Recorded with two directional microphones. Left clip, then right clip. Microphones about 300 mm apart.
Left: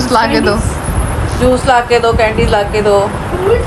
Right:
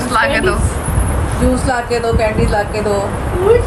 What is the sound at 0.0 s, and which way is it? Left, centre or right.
Speech, centre.